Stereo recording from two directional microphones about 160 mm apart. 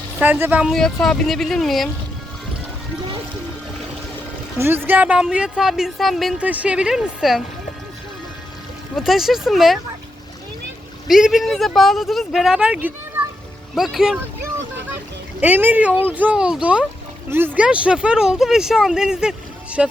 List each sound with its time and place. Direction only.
0.2 s speech: 10° right (ahead or behind)
0.7 s speech: 5° left (ahead or behind)
4.5 s speech: 15° right (ahead or behind)
9.0 s speech: centre (ahead or behind)
11.1 s speech: centre (ahead or behind)